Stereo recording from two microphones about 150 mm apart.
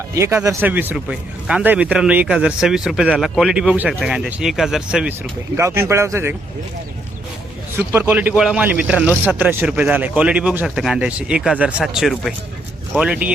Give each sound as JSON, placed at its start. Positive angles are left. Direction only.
{"t": 0.1, "sound": "speech", "side_deg": -20}
{"t": 5.5, "sound": "speech", "side_deg": -20}
{"t": 7.9, "sound": "a man's voice", "side_deg": -10}